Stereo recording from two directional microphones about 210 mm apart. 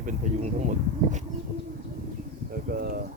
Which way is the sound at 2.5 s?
45° right (ahead or behind).